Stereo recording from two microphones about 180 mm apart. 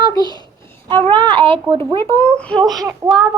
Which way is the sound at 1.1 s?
25° right (ahead or behind).